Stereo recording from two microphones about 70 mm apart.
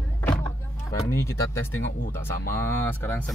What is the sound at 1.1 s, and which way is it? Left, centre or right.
Speech, left.